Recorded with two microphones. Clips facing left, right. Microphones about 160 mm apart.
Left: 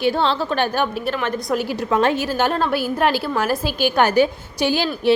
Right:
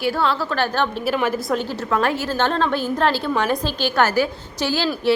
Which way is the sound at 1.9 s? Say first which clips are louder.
Left 2 dB; 20° left (ahead or behind).